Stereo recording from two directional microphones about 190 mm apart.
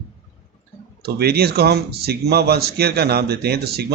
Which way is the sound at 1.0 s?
55° right (ahead or behind).